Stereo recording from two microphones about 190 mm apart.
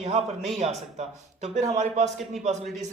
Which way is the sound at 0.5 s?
35° right (ahead or behind).